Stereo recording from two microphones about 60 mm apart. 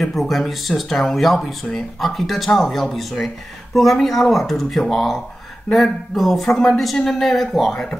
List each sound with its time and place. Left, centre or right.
0.0 s speech: centre